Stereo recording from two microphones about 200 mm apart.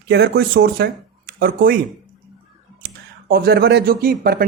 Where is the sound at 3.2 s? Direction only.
50° right (ahead or behind).